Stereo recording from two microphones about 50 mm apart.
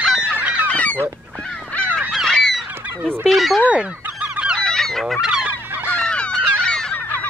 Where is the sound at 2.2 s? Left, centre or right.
Centre.